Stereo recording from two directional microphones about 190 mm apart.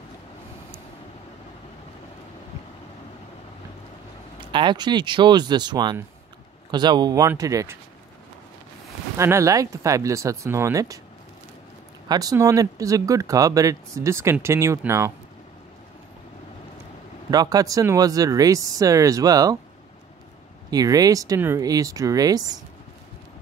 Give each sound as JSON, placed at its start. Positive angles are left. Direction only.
{"t": 4.5, "sound": "speech", "side_deg": -25}
{"t": 9.1, "sound": "speech", "side_deg": -15}
{"t": 12.1, "sound": "speech", "side_deg": -20}
{"t": 17.3, "sound": "speech", "side_deg": -20}
{"t": 20.7, "sound": "speech", "side_deg": -20}